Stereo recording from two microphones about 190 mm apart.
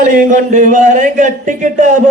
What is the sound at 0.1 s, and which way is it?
A man's voice, 45° right (ahead or behind).